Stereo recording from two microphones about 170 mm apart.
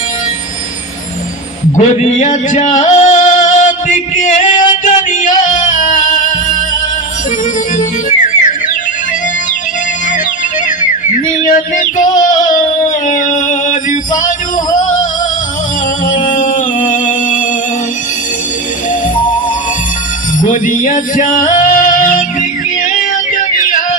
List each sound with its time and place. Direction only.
1.8 s music: 40° left (ahead or behind)
7.8 s music: 50° left (ahead or behind)
11.3 s music: 45° left (ahead or behind)
13.1 s music: 50° left (ahead or behind)
16.0 s music: 50° left (ahead or behind)
20.5 s male singing: 50° left (ahead or behind)
23.3 s music: 50° left (ahead or behind)